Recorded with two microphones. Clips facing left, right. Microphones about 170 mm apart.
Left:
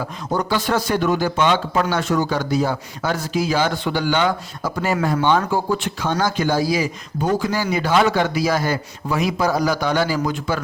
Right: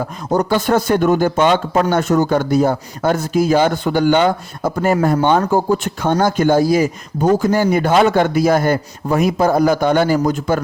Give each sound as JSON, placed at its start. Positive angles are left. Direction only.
{"t": 0.0, "sound": "speech", "side_deg": -45}